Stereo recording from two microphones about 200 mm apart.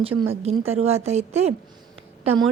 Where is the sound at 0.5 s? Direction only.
30° right (ahead or behind).